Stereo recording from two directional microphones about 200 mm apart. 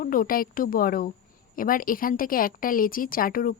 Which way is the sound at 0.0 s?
45° left (ahead or behind).